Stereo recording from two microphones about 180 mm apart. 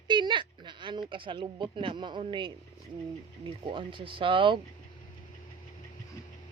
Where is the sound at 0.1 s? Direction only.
25° right (ahead or behind).